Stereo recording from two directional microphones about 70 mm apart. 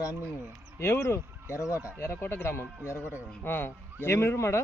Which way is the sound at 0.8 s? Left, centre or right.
Left.